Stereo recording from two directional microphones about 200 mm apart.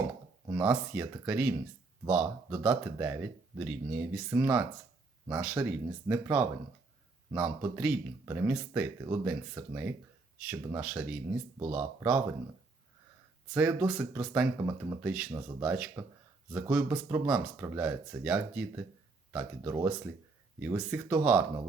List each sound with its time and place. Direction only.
0.4 s a sound: 20° right (ahead or behind)
0.7 s speech: 10° right (ahead or behind)
13.5 s speech: 5° right (ahead or behind)
15.1 s speech: 5° right (ahead or behind)